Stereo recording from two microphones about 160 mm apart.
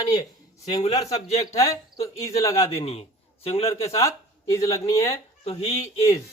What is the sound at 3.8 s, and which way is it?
Speech, 20° left (ahead or behind).